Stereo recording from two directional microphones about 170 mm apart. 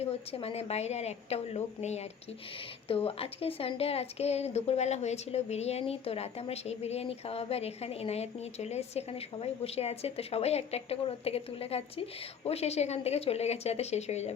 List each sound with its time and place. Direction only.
0.0 s a woman's voice: 35° left (ahead or behind)